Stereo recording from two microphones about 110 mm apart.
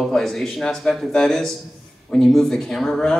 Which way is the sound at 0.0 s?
Centre (ahead or behind).